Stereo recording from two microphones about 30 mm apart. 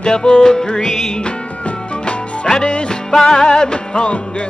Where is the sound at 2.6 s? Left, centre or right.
Left.